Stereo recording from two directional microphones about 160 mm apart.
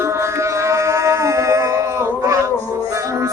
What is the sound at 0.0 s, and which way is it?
Music, 20° right (ahead or behind).